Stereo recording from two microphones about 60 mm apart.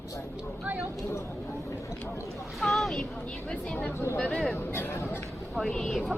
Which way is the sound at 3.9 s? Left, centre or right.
Left.